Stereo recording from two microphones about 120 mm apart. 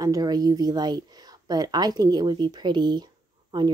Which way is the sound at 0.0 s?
30° right (ahead or behind).